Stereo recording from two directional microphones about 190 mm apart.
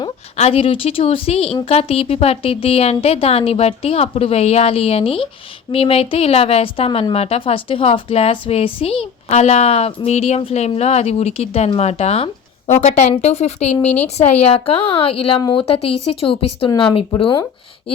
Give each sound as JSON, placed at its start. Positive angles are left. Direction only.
{"t": 0.3, "sound": "a woman's voice", "side_deg": 35}